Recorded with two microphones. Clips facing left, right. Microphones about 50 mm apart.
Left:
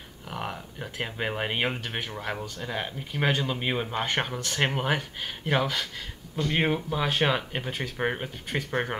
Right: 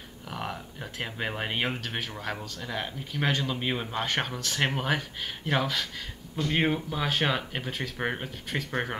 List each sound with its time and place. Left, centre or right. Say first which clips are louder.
0.3 s speech: left 1 dB; centre